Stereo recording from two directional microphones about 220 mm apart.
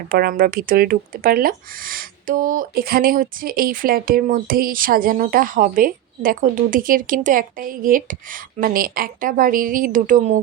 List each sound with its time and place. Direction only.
0.1 s speech: 40° right (ahead or behind)